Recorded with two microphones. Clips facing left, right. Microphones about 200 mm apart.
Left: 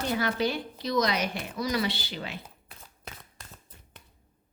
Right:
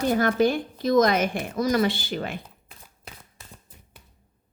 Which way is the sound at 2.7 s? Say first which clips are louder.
Left 2 dB; 5° right (ahead or behind).